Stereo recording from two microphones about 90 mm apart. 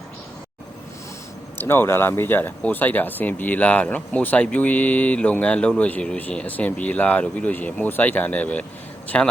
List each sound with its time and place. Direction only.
1.5 s speech: 25° left (ahead or behind)